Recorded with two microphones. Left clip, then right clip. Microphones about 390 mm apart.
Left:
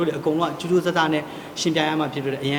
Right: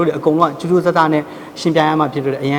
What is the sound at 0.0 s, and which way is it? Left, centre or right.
A man's voice, right.